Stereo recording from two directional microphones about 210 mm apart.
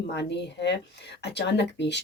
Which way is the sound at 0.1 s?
55° left (ahead or behind).